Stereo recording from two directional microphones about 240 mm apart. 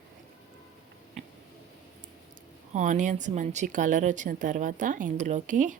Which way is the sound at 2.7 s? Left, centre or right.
Right.